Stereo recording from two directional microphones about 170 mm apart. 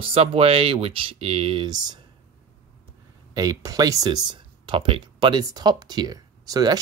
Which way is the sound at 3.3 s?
20° right (ahead or behind).